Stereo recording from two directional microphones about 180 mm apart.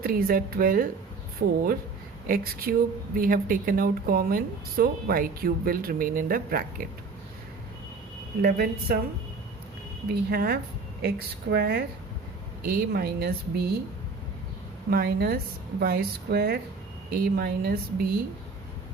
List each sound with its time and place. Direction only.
0.0 s speech: 55° right (ahead or behind)
8.4 s speech: 60° right (ahead or behind)
10.1 s speech: 60° right (ahead or behind)
14.8 s speech: 60° right (ahead or behind)